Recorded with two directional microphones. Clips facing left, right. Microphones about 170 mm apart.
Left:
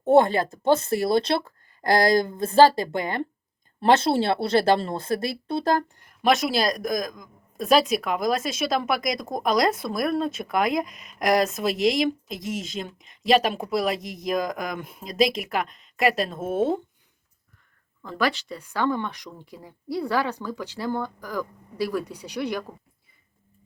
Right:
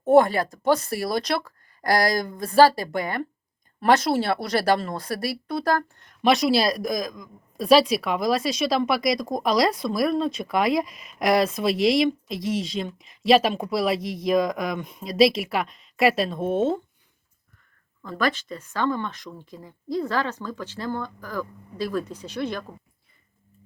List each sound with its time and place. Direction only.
0.1 s speech: 25° left (ahead or behind)
6.2 s speech: centre (ahead or behind)
18.2 s speech: 10° left (ahead or behind)